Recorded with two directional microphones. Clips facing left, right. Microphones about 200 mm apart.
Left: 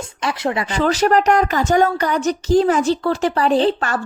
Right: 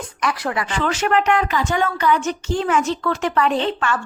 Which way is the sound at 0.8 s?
35° left (ahead or behind).